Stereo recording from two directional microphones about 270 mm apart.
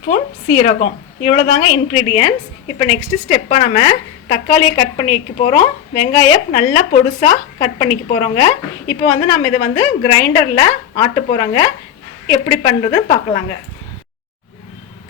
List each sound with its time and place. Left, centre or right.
0.1 s a woman's voice: left